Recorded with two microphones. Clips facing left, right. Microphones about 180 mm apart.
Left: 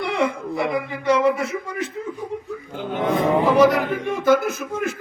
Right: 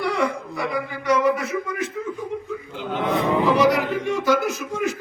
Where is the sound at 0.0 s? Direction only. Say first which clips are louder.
Left 1 dB; 20° left (ahead or behind).